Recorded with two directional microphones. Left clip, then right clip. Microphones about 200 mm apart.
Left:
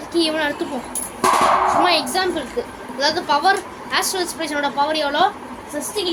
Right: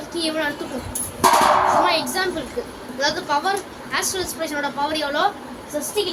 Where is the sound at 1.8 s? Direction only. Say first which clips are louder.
Left 2 dB; 40° left (ahead or behind).